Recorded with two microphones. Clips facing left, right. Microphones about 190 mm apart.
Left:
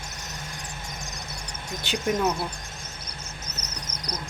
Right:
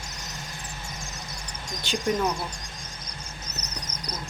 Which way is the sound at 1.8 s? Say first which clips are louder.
Left 1 dB; 15° left (ahead or behind).